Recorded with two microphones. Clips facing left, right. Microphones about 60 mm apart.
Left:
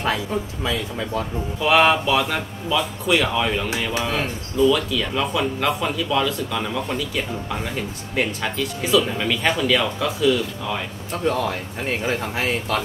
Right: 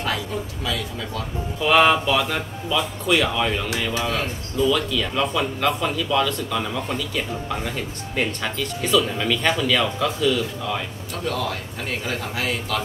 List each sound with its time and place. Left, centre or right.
0.7 s speech: left
1.6 s speech: centre
3.7 s speech: centre
4.6 s speech: centre
11.2 s speech: left